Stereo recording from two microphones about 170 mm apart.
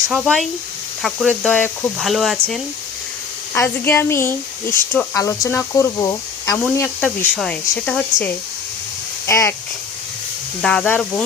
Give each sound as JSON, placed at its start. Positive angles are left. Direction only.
{"t": 0.1, "sound": "speech", "side_deg": 0}
{"t": 3.5, "sound": "speech", "side_deg": 10}
{"t": 7.2, "sound": "speech", "side_deg": 5}
{"t": 10.6, "sound": "speech", "side_deg": 5}